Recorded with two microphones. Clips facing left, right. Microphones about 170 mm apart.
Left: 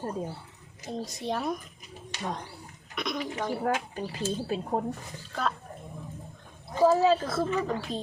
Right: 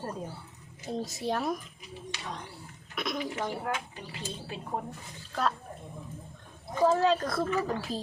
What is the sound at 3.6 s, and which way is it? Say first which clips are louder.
Speech: left 6 dB; 45° left (ahead or behind).